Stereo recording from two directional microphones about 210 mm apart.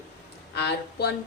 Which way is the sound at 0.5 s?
50° left (ahead or behind).